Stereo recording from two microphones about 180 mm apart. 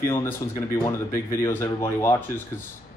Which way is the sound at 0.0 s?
15° left (ahead or behind).